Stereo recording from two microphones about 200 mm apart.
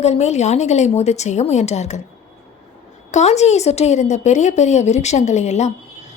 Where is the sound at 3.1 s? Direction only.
35° left (ahead or behind).